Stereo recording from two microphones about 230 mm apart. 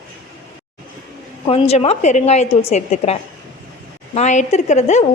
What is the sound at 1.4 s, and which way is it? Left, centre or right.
A woman's voice, left.